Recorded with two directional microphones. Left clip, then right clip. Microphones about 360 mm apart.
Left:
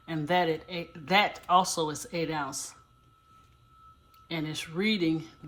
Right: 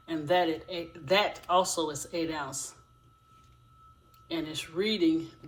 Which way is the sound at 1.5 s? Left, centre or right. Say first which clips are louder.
Left 2 dB; left.